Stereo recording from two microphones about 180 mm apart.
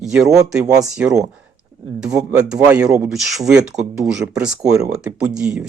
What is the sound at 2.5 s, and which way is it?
Speech, 5° right (ahead or behind).